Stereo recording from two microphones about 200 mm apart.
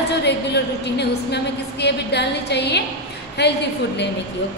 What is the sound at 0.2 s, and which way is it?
A woman's voice, 60° left (ahead or behind).